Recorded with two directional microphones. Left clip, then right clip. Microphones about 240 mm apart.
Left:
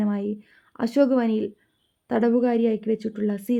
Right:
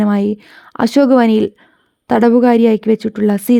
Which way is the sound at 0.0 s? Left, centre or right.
Right.